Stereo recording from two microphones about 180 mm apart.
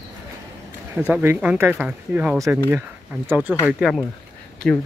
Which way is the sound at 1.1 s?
10° right (ahead or behind).